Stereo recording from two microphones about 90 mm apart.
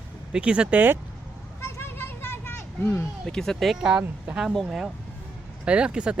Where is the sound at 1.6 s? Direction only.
25° left (ahead or behind).